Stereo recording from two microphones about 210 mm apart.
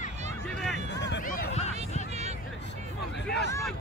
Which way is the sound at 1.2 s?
40° left (ahead or behind).